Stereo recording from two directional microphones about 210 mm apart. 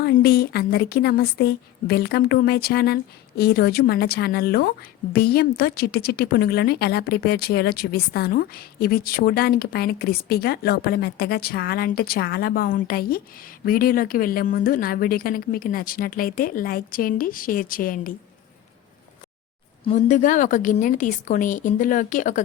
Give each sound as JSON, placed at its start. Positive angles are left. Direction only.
{"t": 0.0, "sound": "a woman's voice", "side_deg": 50}
{"t": 19.8, "sound": "a woman's voice", "side_deg": 35}